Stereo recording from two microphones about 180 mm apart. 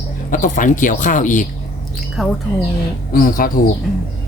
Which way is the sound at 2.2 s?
Centre (ahead or behind).